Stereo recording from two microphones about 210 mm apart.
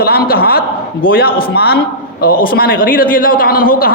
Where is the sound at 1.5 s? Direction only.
50° left (ahead or behind).